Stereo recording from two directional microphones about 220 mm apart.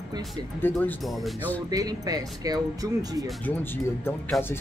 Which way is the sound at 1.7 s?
15° right (ahead or behind).